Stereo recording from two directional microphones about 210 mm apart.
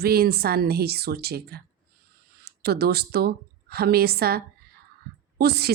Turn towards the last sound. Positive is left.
turn(degrees=-50)  # may be behind; listen again after turning